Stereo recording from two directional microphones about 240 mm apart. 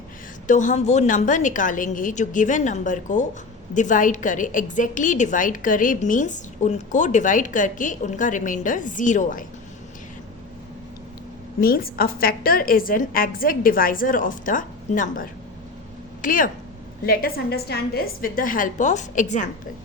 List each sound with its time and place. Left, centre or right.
0.4 s a woman's voice: left
11.6 s a woman's voice: left